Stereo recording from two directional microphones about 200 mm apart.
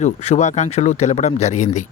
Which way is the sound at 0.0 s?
35° left (ahead or behind).